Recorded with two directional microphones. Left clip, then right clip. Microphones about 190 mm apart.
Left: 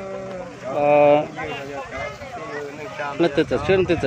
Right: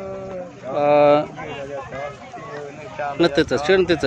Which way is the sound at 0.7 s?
15° right (ahead or behind).